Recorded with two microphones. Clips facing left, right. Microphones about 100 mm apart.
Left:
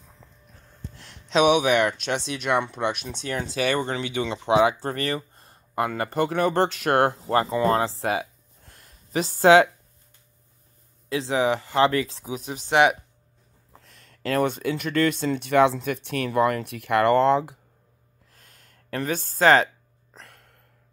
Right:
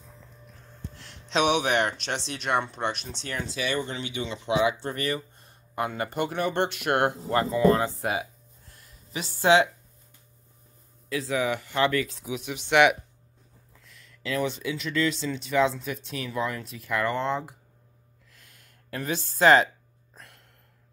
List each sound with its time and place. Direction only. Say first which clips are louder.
0.9 s speech: left 5 dB; 45° left (ahead or behind); by 4.3 s 90° left
4.6 s speech: left 2 dB; 40° left (ahead or behind)
8.2 s a sound: left 2 dB; 55° left (ahead or behind)
9.2 s speech: left 5 dB; 45° left (ahead or behind)
11.1 s speech: left 4 dB; 25° left (ahead or behind); by 17.6 s 90° left
18.3 s a sound: left 2 dB; 45° left (ahead or behind)